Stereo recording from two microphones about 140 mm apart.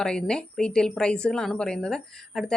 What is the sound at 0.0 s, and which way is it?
A woman's voice, 5° left (ahead or behind).